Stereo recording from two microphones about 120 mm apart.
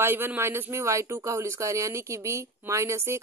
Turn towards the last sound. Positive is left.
turn(degrees=-25)  # may be behind; listen again after turning